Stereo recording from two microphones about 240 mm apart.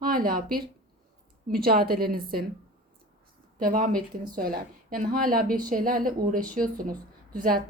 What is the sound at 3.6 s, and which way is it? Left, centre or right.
Speech, right.